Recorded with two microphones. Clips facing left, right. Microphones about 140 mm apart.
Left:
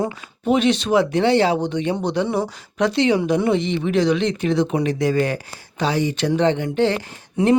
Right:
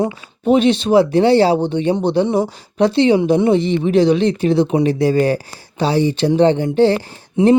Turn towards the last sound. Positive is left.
turn(degrees=-30)  # may be behind; listen again after turning